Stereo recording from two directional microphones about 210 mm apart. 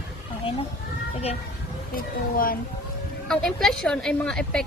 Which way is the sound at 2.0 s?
40° left (ahead or behind).